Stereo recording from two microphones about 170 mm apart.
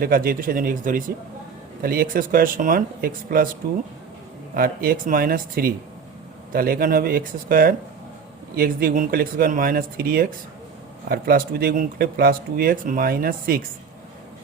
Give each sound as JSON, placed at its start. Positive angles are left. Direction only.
{"t": 0.0, "sound": "speech", "side_deg": -55}
{"t": 4.5, "sound": "speech", "side_deg": -60}